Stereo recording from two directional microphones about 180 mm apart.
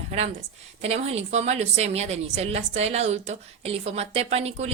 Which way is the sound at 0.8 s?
35° right (ahead or behind).